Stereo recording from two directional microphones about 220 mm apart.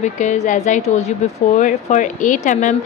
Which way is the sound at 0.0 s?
35° left (ahead or behind).